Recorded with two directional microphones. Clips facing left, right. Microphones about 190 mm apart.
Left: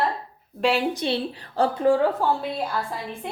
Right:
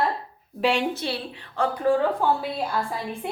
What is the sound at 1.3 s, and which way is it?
Speech, 35° left (ahead or behind).